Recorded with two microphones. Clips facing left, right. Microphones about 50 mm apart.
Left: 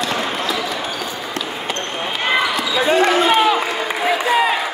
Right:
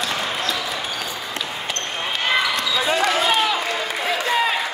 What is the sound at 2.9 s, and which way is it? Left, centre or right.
Basketball bounce, left.